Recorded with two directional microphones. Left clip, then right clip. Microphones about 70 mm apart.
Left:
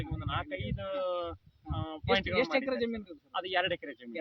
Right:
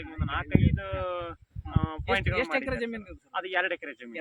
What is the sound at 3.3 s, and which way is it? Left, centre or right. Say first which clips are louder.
Speech: right 2 dB; left.